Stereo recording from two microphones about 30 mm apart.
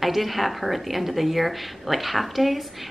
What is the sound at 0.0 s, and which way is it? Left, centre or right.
A woman's voice, centre.